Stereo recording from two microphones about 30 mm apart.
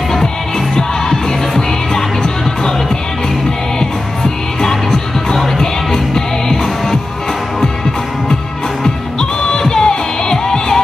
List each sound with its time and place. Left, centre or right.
4.2 s music: centre
8.8 s music: centre